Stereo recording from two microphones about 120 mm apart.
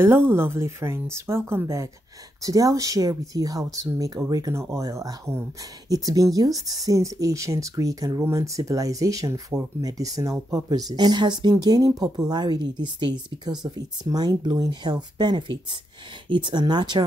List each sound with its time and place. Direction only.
0.0 s speech: 20° right (ahead or behind); by 17.0 s 40° right (ahead or behind)